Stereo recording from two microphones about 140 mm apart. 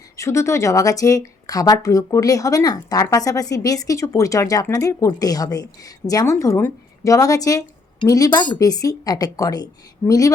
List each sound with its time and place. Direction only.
0.2 s speech: 20° left (ahead or behind)